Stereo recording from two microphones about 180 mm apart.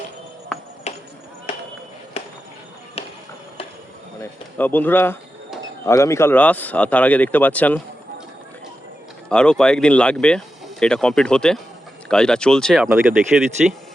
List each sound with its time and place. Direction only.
0.9 s music: 40° left (ahead or behind)
2.2 s chop: 35° left (ahead or behind)
4.2 s speech: 10° left (ahead or behind)
9.3 s speech: 5° left (ahead or behind)